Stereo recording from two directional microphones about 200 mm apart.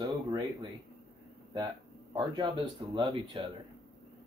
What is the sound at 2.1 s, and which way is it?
Speech, 20° right (ahead or behind).